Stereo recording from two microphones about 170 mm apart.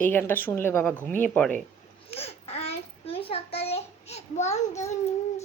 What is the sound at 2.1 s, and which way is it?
Babbling, 35° left (ahead or behind).